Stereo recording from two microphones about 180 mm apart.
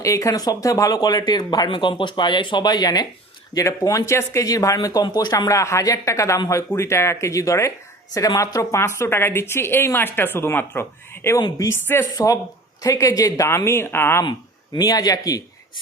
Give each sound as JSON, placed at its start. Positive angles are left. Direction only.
{"t": 0.0, "sound": "speech", "side_deg": 15}